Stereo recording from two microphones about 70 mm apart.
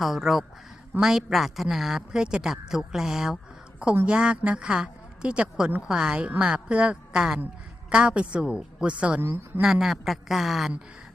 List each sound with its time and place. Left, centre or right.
0.0 s a woman's voice: centre